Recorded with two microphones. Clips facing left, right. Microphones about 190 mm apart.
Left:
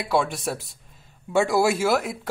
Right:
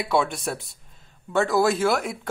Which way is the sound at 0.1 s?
Centre (ahead or behind).